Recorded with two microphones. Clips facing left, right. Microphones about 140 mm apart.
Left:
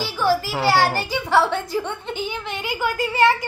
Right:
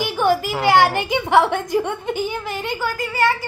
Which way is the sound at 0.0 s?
20° right (ahead or behind).